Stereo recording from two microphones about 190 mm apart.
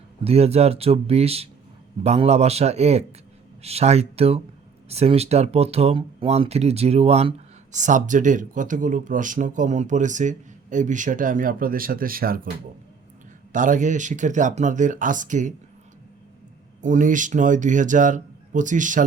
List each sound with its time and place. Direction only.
0.3 s speech: 35° right (ahead or behind); by 12.5 s 50° right (ahead or behind)
13.5 s speech: 45° right (ahead or behind)
16.8 s speech: 40° right (ahead or behind)